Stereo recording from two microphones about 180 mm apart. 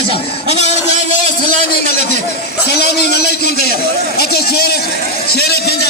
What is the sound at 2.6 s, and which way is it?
A man's voice, 65° left (ahead or behind).